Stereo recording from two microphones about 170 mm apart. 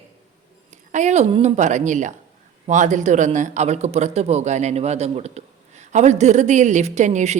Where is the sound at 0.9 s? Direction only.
45° right (ahead or behind).